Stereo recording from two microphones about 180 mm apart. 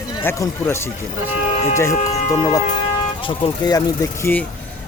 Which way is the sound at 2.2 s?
20° left (ahead or behind).